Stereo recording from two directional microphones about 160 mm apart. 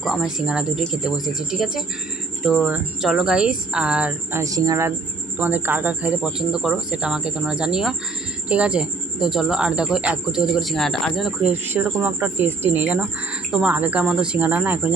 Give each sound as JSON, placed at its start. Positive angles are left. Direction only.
{"t": 0.0, "sound": "speech", "side_deg": -5}
{"t": 11.5, "sound": "speech", "side_deg": -10}